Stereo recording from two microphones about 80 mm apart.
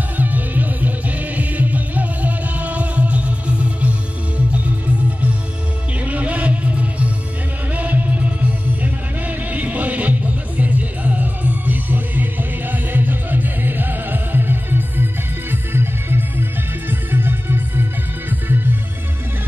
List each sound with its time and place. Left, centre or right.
0.2 s music: right
5.9 s music: centre